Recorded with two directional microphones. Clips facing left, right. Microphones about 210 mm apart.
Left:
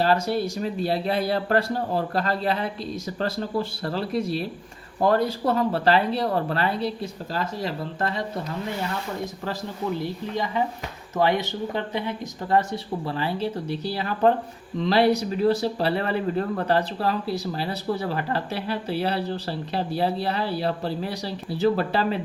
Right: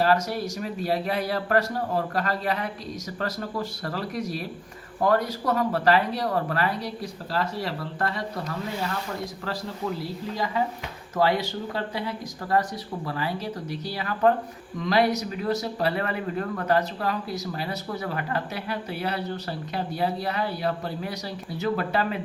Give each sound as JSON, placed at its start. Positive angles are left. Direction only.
{"t": 0.0, "sound": "speech", "side_deg": 30}
{"t": 10.0, "sound": "speech", "side_deg": 20}